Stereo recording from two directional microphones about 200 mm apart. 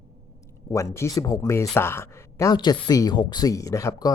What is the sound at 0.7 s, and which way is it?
Speech, 15° left (ahead or behind).